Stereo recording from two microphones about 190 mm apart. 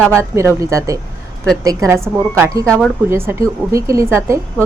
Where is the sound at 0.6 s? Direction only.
15° right (ahead or behind).